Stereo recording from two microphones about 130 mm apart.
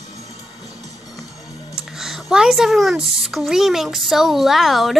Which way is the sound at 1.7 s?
5° right (ahead or behind).